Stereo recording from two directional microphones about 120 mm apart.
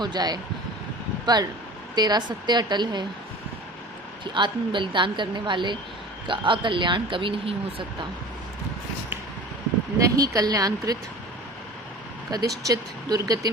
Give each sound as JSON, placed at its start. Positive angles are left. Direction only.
{"t": 0.0, "sound": "a woman's voice", "side_deg": -35}
{"t": 4.2, "sound": "a woman's voice", "side_deg": -40}
{"t": 10.0, "sound": "a woman's voice", "side_deg": -30}
{"t": 12.3, "sound": "a woman's voice", "side_deg": -30}